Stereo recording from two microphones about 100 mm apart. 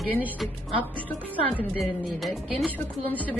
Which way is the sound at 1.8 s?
Centre (ahead or behind).